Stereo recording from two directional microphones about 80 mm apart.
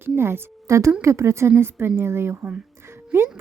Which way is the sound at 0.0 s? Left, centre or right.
Right.